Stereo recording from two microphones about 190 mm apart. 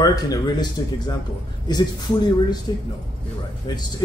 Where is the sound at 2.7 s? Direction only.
25° left (ahead or behind).